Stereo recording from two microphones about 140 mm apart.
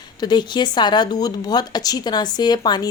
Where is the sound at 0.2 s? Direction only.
30° left (ahead or behind).